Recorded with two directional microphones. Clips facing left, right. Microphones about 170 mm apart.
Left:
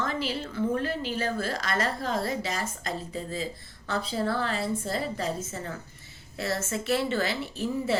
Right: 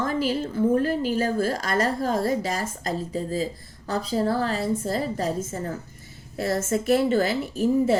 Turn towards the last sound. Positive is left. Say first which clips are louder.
# right 8 dB
turn(degrees=-45)  # may be behind; listen again after turning